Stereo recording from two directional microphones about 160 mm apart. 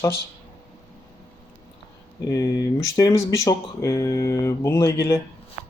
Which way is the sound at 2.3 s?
25° left (ahead or behind).